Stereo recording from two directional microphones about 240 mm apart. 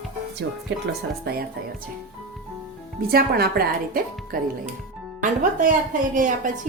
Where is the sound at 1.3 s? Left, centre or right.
Right.